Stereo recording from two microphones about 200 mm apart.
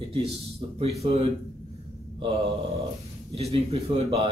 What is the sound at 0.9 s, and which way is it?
Speech, 30° right (ahead or behind).